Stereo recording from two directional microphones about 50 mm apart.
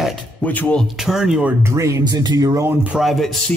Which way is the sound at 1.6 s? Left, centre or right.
Right.